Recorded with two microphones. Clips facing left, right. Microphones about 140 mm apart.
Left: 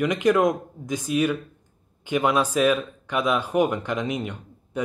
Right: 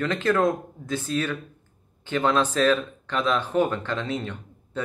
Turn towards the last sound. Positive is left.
turn(degrees=15)  # may be behind; listen again after turning